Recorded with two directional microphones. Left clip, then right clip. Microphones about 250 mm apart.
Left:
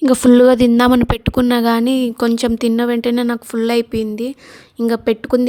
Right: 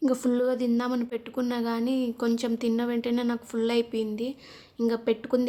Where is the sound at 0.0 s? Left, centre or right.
Left.